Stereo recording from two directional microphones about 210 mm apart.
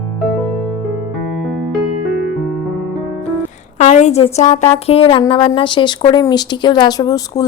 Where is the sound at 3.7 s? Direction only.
35° left (ahead or behind).